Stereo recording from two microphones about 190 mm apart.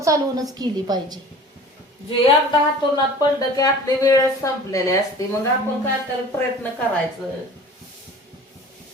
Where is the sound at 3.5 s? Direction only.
20° left (ahead or behind).